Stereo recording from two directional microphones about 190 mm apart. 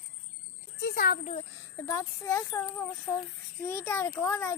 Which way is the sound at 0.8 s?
55° left (ahead or behind).